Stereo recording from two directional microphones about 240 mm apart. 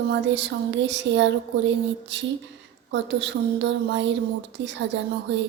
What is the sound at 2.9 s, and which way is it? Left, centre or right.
Speech, right.